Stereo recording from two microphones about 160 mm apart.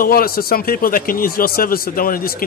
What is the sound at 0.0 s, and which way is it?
A man's voice, 65° left (ahead or behind).